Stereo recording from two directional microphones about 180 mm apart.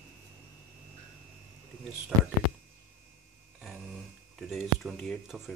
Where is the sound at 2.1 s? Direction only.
20° right (ahead or behind).